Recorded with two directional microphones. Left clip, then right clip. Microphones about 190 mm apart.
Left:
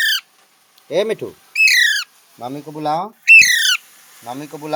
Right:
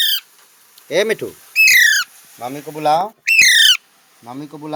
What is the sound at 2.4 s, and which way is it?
Speech, 5° left (ahead or behind).